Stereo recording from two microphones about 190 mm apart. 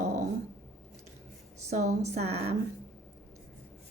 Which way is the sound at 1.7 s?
40° right (ahead or behind).